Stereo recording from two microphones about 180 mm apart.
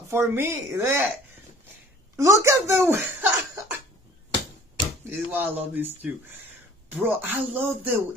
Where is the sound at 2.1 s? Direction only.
15° right (ahead or behind).